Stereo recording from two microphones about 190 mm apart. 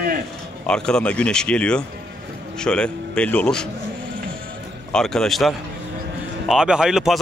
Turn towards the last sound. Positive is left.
turn(degrees=0)  # may be behind; listen again after turning